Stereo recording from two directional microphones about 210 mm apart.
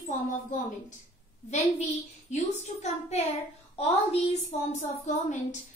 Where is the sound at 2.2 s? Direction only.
35° left (ahead or behind).